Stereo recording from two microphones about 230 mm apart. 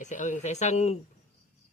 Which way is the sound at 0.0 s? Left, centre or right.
Left.